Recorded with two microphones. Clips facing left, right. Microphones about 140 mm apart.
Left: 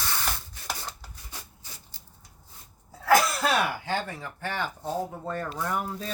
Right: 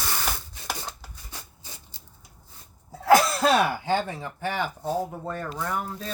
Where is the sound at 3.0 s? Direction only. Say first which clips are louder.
Right 3 dB; 25° right (ahead or behind).